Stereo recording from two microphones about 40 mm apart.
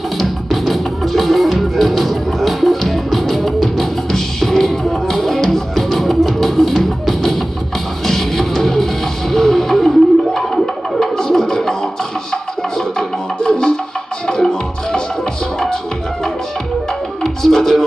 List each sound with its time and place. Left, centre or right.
0.2 s music: centre
13.4 s music: centre
17.2 s music: centre